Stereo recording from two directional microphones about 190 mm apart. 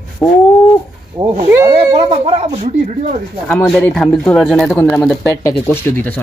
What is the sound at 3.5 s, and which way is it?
Speech, 5° left (ahead or behind).